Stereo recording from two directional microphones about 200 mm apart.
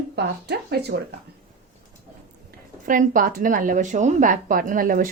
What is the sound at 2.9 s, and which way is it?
A woman's voice, 40° right (ahead or behind).